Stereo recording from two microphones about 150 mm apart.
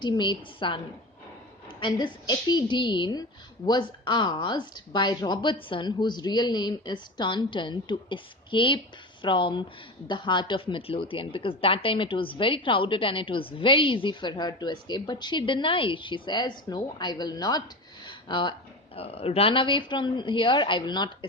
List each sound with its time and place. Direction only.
0.0 s a woman's voice: 30° left (ahead or behind)
18.0 s a sound: 30° left (ahead or behind)
18.9 s a woman's voice: 40° left (ahead or behind)